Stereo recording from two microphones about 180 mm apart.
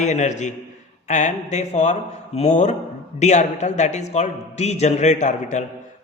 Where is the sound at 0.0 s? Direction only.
40° left (ahead or behind).